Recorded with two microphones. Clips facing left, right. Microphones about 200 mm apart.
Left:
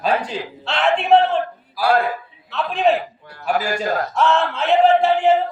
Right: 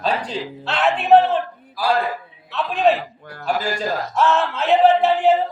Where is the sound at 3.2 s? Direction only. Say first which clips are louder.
Right 4 dB; 50° right (ahead or behind).